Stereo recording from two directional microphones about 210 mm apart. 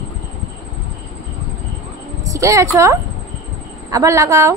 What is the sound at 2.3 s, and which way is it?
A woman's voice, 15° right (ahead or behind).